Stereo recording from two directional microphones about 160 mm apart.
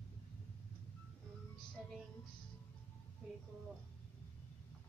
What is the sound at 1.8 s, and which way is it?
Music, 5° right (ahead or behind).